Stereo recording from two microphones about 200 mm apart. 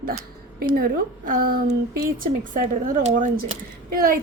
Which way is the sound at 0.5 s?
45° right (ahead or behind).